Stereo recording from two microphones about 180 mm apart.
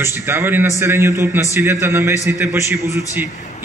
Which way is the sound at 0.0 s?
15° right (ahead or behind).